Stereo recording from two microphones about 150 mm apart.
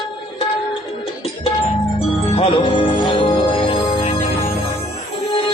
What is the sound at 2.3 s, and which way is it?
Music, 40° left (ahead or behind).